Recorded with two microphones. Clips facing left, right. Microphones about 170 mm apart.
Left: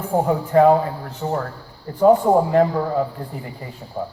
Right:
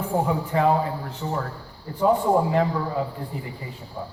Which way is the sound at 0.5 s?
45° left (ahead or behind).